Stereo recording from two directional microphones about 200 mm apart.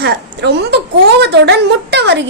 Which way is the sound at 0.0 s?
55° right (ahead or behind).